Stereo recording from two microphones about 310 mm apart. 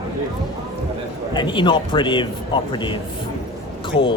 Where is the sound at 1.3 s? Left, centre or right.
Centre.